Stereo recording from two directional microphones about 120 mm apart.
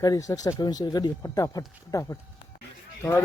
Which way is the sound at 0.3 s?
35° left (ahead or behind).